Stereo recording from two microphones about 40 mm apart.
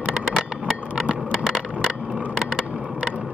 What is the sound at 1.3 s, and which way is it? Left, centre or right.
Skateboard, right.